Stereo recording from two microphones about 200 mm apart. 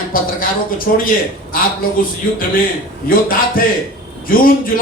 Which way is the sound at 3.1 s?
45° left (ahead or behind).